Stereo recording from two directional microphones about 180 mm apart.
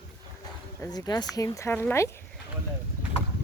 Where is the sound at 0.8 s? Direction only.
20° left (ahead or behind).